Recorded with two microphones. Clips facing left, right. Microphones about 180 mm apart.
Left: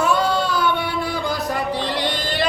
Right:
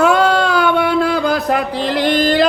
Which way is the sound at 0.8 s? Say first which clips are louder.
Right 10 dB; 75° right (ahead or behind).